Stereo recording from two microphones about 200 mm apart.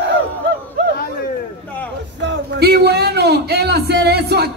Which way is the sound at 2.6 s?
55° right (ahead or behind).